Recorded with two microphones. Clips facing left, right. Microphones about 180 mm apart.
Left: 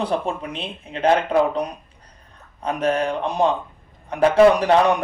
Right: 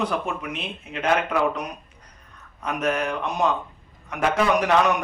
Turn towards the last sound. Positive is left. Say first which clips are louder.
# left 3 dB
turn(degrees=30)  # may be behind; listen again after turning